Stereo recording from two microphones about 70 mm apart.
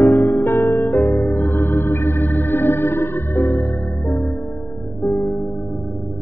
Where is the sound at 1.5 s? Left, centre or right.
Left.